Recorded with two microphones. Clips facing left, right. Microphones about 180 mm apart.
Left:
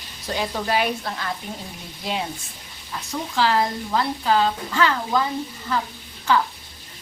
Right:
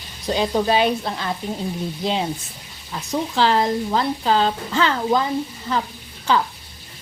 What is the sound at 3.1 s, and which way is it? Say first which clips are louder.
Speech: right 3 dB; 25° right (ahead or behind).